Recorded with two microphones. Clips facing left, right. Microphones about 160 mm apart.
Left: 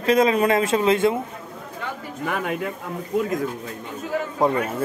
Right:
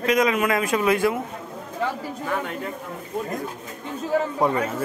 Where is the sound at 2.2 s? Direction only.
80° left.